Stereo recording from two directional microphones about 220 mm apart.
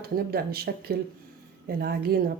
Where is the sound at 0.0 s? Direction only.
45° right (ahead or behind).